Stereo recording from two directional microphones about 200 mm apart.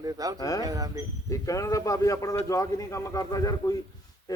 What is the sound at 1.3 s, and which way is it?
A man's voice, 15° left (ahead or behind).